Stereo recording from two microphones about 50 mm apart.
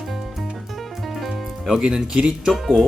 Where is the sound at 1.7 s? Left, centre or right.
Centre.